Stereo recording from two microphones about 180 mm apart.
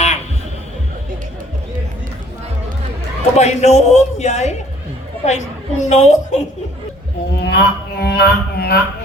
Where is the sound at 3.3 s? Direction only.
40° left (ahead or behind).